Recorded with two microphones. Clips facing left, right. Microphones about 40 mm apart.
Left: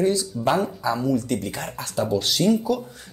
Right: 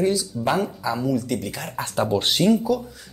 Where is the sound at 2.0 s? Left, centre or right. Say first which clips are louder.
Right 1 dB; right.